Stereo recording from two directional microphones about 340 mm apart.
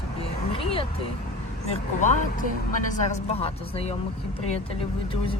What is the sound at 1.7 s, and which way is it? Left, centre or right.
Speech, left.